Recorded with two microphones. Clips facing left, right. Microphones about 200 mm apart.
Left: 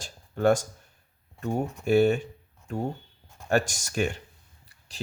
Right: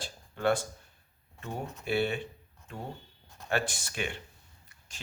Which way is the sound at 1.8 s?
45° left (ahead or behind).